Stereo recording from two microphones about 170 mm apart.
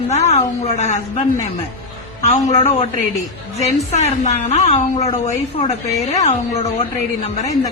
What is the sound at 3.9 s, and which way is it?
A woman's voice, 40° left (ahead or behind).